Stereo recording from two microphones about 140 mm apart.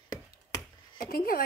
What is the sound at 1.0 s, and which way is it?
Speech, 90° left.